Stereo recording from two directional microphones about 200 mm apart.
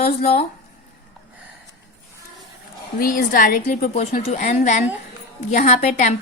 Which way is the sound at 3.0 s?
45° left (ahead or behind).